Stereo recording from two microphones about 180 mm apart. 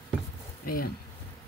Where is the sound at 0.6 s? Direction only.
55° left (ahead or behind).